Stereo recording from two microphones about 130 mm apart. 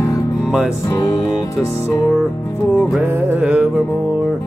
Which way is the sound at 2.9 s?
15° right (ahead or behind).